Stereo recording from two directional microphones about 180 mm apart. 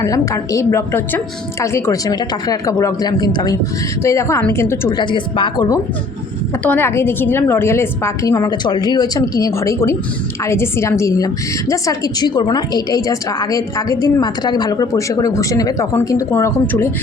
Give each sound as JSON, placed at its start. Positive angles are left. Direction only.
{"t": 0.0, "sound": "a woman's voice", "side_deg": 20}
{"t": 4.9, "sound": "a woman's voice", "side_deg": 25}